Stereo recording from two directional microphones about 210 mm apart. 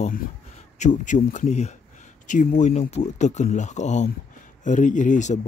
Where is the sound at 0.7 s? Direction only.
35° left (ahead or behind).